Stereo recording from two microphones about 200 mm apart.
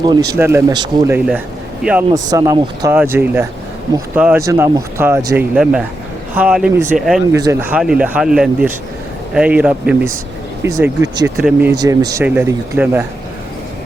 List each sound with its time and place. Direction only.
0.0 s speech: 20° right (ahead or behind)
1.1 s speech: 5° right (ahead or behind)
2.1 s speech: 20° right (ahead or behind); by 7.2 s centre (ahead or behind)
7.3 s speech: 15° right (ahead or behind)
11.3 s speech: 5° right (ahead or behind)
11.8 s speech: 15° right (ahead or behind)